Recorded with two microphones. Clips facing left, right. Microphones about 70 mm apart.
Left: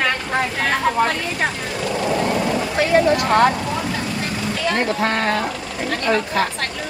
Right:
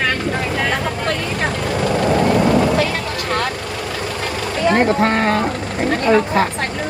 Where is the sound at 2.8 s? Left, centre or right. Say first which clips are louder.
Left 4 dB; left.